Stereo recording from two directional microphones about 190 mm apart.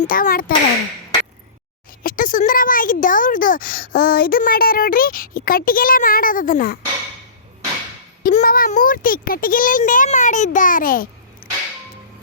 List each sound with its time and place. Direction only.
0.0 s speech: 45° left (ahead or behind)
2.0 s speech: 45° left (ahead or behind)
8.2 s speech: 45° left (ahead or behind)
11.4 s music: 50° left (ahead or behind)